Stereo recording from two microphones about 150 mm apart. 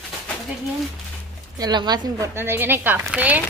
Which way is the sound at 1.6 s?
30° right (ahead or behind).